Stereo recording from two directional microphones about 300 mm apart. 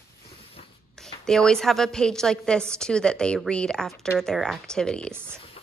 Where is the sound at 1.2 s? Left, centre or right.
Centre.